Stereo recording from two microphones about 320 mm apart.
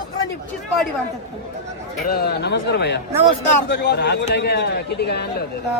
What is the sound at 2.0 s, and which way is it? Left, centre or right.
A man's voice, left.